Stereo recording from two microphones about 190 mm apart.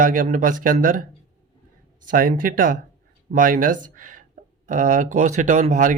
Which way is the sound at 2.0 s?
45° right (ahead or behind).